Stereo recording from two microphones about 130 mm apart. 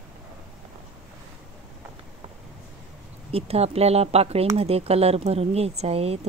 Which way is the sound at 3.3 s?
50° right (ahead or behind).